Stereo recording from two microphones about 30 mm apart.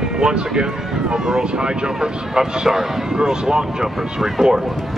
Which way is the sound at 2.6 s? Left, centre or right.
Centre.